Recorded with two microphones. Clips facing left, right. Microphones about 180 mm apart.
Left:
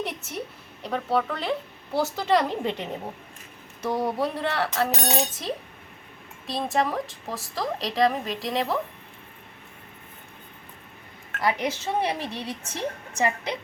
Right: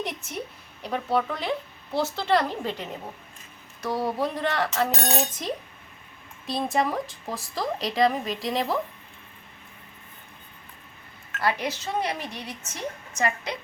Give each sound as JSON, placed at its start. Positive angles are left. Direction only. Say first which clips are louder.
{"t": 0.0, "sound": "a sound", "louder": "left 1 dB", "side_deg": 0}
{"t": 2.0, "sound": "speech", "louder": "left 1 dB", "side_deg": 15}
{"t": 3.9, "sound": "speech", "louder": "even", "side_deg": 10}
{"t": 11.3, "sound": "a woman's voice", "louder": "left 1 dB", "side_deg": 20}